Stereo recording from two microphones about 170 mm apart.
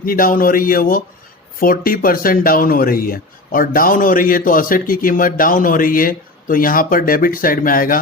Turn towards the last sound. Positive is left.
turn(degrees=55)  # may be behind; listen again after turning